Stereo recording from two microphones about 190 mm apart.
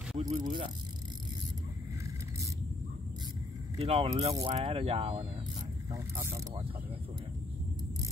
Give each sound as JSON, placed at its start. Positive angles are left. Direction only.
{"t": 0.2, "sound": "a sound", "side_deg": -25}
{"t": 3.7, "sound": "speech", "side_deg": -30}
{"t": 5.9, "sound": "speech", "side_deg": -15}